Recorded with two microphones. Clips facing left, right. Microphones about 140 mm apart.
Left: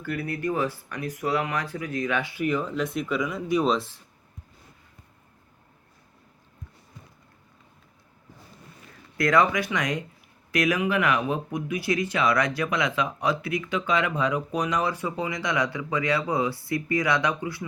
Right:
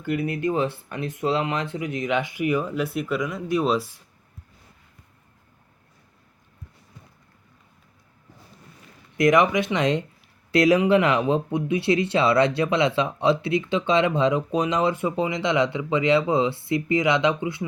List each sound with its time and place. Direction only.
0.0 s speech: 20° right (ahead or behind)
9.1 s speech: 20° right (ahead or behind)